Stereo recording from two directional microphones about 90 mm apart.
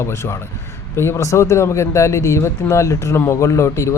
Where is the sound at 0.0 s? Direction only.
30° left (ahead or behind).